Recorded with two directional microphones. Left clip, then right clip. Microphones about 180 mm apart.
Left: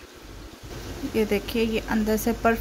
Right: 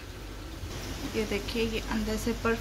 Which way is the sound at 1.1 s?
50° left (ahead or behind).